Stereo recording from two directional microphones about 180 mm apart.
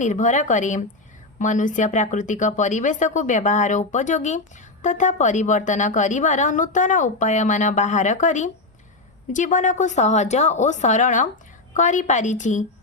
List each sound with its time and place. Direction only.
0.0 s a woman's voice: 45° left (ahead or behind)